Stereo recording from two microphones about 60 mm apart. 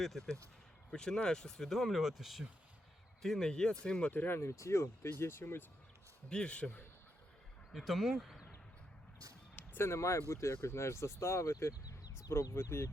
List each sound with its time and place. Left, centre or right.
0.0 s speech: centre
0.9 s speech: centre
4.1 s speech: left
4.4 s speech: left
5.0 s speech: left
6.2 s speech: centre
7.7 s speech: centre
9.7 s speech: left
11.7 s a sound: left
12.6 s speech: left